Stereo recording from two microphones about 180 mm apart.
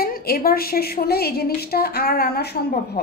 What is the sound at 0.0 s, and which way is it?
A woman's voice, 55° left (ahead or behind).